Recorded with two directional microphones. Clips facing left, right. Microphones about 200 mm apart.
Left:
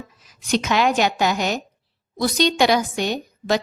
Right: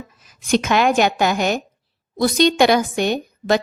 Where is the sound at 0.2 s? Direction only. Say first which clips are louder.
Right 4 dB; 50° right (ahead or behind).